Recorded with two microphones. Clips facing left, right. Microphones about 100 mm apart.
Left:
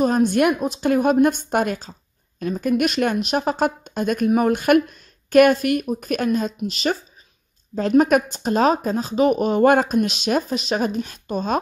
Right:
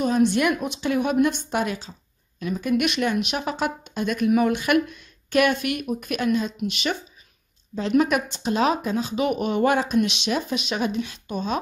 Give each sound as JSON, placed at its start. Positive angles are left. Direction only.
{"t": 0.0, "sound": "speech", "side_deg": 45}